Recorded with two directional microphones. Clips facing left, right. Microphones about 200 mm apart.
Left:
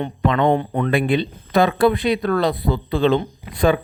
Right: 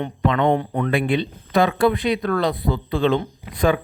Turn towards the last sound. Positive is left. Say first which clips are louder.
# left 2 dB
turn(degrees=30)  # may be behind; listen again after turning